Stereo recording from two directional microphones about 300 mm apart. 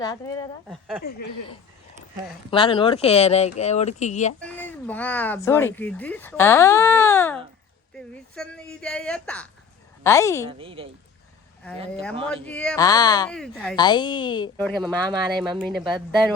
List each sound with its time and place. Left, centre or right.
0.0 s speech: centre
0.7 s speech: centre
2.5 s speech: centre
4.4 s speech: centre
10.5 s speech: centre
12.5 s speech: centre
13.3 s speech: centre
13.7 s speech: centre
14.7 s speech: centre